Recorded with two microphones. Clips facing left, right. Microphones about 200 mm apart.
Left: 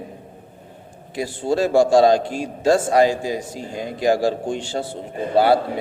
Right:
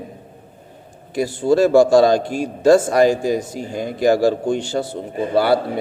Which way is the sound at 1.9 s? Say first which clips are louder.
Right 1 dB; 45° right (ahead or behind).